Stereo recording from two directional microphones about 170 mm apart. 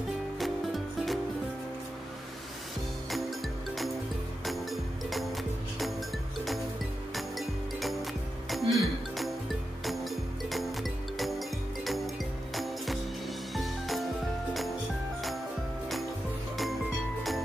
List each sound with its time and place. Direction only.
0.4 s music: centre (ahead or behind)
3.1 s music: centre (ahead or behind)
7.2 s music: centre (ahead or behind)